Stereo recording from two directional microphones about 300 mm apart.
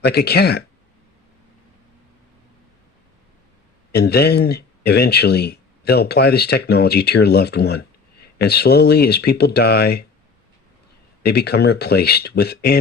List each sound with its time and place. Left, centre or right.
0.0 s speech: left
3.9 s speech: left
11.2 s speech: left